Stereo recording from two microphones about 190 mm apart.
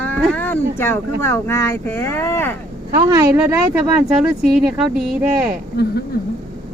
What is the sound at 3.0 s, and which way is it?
Speech, 20° right (ahead or behind).